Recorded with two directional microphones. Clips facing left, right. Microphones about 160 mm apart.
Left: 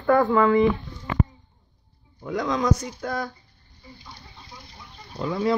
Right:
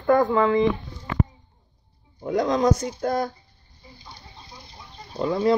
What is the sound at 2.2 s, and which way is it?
Speech, 40° right (ahead or behind).